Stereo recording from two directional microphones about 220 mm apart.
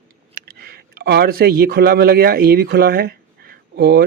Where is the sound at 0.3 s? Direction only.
45° right (ahead or behind).